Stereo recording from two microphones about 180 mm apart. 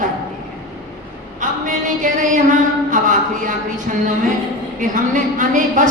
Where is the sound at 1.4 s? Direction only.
45° right (ahead or behind).